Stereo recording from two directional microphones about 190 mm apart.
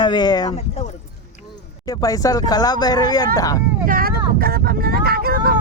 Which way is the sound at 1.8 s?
20° left (ahead or behind).